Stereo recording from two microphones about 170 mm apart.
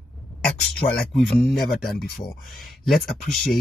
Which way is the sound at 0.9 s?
5° left (ahead or behind).